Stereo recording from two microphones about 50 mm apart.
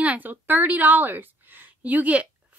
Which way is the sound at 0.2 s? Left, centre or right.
Right.